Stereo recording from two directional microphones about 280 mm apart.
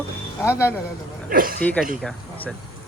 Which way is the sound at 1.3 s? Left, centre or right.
Right.